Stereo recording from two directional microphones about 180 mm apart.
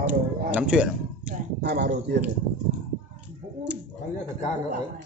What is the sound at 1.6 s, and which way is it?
Speech, 70° right (ahead or behind).